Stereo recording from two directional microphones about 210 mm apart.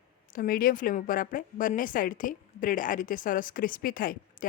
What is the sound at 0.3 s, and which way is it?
A woman's voice, 45° left (ahead or behind).